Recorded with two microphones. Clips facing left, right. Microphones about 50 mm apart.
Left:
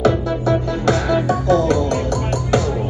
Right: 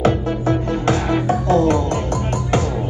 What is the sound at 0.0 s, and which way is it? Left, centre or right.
Music, right.